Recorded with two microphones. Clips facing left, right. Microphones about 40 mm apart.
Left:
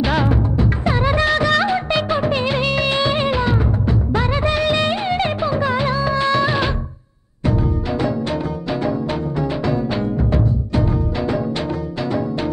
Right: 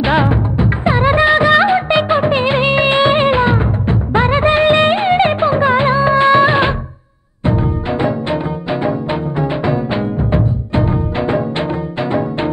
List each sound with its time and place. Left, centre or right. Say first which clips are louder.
0.0 s music of bollywood: right 4 dB; right
7.4 s music: right 3 dB; right
9.4 s music: right 3 dB; right